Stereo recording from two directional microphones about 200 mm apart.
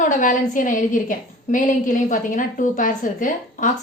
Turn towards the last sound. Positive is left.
turn(degrees=40)  # may be behind; listen again after turning